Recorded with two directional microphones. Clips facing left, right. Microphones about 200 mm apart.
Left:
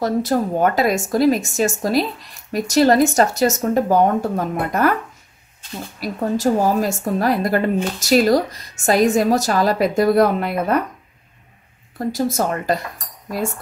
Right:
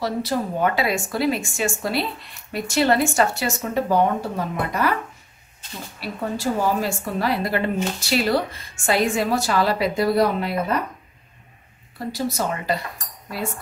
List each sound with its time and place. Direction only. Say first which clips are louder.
0.0 s speech: left 5 dB; 45° left (ahead or behind)
5.9 s a woman's voice: left 6 dB; 40° left (ahead or behind)
12.0 s a woman's voice: left 5 dB; 45° left (ahead or behind)